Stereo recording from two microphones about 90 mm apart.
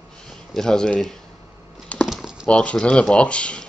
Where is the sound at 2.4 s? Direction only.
10° left (ahead or behind).